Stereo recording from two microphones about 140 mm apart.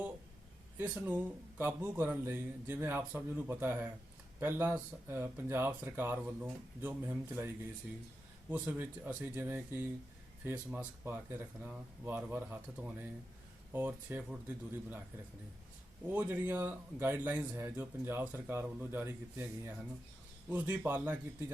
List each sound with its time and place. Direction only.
0.8 s speech: 15° right (ahead or behind)
16.0 s speech: 15° right (ahead or behind)